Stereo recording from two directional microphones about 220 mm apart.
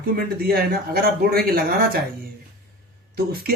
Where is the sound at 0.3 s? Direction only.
45° right (ahead or behind).